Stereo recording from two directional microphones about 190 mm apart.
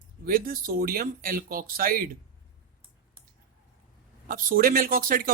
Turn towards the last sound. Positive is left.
turn(degrees=-50)  # may be behind; listen again after turning